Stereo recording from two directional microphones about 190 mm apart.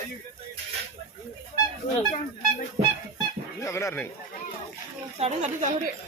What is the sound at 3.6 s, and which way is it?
Speech, 15° left (ahead or behind).